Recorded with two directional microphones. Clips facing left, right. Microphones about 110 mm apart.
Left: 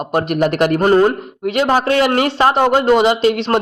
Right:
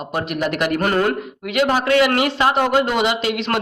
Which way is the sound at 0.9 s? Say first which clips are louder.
Left 7 dB; 30° left (ahead or behind).